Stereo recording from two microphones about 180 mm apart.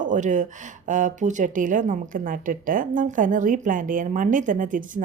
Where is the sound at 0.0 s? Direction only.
45° right (ahead or behind).